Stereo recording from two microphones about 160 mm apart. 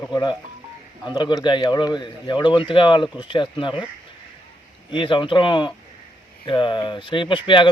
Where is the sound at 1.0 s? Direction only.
30° left (ahead or behind).